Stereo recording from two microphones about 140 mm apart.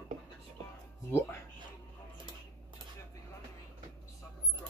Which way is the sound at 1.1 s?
15° left (ahead or behind).